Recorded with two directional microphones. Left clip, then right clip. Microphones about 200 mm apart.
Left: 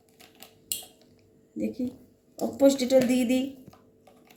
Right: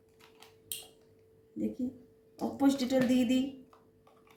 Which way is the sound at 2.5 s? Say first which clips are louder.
Left 9 dB; 20° right (ahead or behind).